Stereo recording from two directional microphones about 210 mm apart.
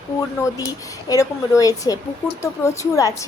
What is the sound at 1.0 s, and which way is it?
A woman's voice, 15° left (ahead or behind).